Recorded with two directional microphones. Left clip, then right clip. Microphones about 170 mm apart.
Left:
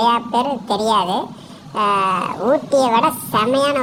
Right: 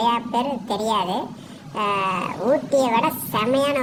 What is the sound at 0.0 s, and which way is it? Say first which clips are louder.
A woman's voice: left 5 dB; 15° left (ahead or behind).